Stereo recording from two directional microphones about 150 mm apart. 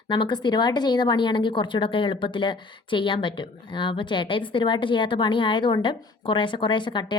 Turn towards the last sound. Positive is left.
turn(degrees=30)  # may be behind; listen again after turning